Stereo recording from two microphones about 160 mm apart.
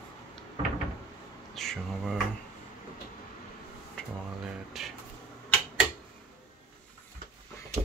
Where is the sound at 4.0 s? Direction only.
5° left (ahead or behind).